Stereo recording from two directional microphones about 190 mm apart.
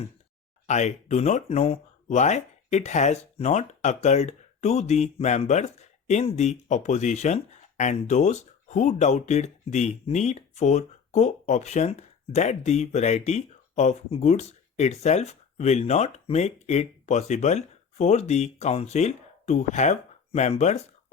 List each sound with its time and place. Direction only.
0.7 s speech: 35° left (ahead or behind)